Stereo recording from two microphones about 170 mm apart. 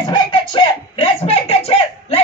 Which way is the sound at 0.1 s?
30° left (ahead or behind).